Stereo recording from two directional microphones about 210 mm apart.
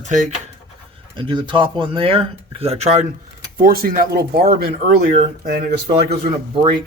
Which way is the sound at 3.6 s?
45° right (ahead or behind).